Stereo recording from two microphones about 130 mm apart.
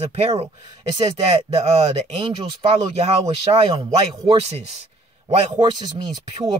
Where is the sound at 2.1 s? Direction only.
45° right (ahead or behind).